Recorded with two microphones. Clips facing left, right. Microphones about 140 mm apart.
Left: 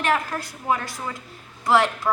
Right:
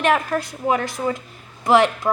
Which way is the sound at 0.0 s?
20° right (ahead or behind).